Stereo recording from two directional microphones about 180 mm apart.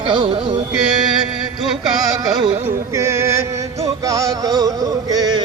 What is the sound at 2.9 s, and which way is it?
Music, 15° right (ahead or behind).